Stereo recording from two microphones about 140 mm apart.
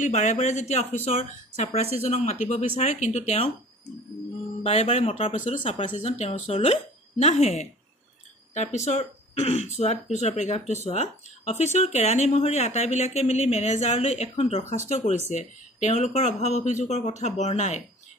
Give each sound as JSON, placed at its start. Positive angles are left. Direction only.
{"t": 0.0, "sound": "speech", "side_deg": 60}
{"t": 4.6, "sound": "speech", "side_deg": 50}